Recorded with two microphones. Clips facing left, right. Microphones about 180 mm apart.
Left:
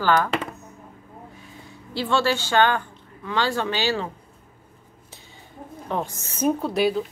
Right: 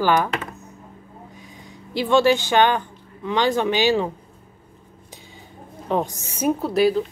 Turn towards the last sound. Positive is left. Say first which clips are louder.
# right 3 dB
turn(degrees=0)  # may be behind; listen again after turning